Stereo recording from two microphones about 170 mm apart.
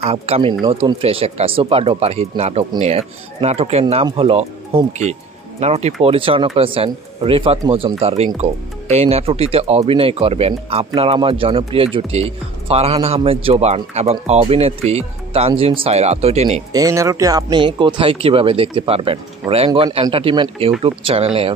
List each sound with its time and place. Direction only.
0.0 s speech: 35° right (ahead or behind)
16.7 s speech: 20° right (ahead or behind)